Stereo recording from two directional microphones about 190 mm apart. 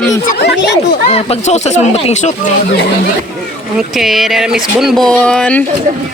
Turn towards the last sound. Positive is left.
turn(degrees=5)  # may be behind; listen again after turning